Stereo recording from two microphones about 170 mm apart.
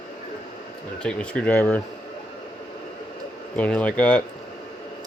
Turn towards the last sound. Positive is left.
turn(degrees=5)  # may be behind; listen again after turning